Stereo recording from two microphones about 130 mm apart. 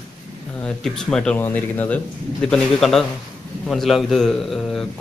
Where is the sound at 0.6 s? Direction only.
5° left (ahead or behind).